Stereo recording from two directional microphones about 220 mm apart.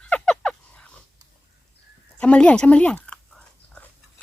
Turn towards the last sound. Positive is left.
turn(degrees=5)  # may be behind; listen again after turning